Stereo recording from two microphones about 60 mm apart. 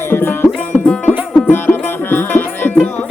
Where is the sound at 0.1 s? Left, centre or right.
Left.